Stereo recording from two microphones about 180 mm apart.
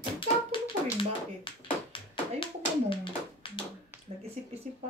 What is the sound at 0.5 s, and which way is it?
Dog, 30° left (ahead or behind).